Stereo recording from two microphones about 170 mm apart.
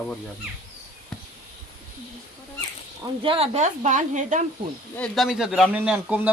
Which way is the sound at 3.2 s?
35° right (ahead or behind).